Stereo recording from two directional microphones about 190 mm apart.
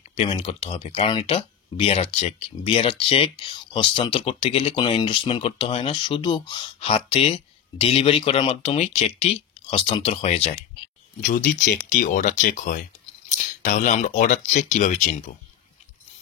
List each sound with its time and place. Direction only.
0.1 s speech: 30° left (ahead or behind)
11.2 s speech: 45° left (ahead or behind)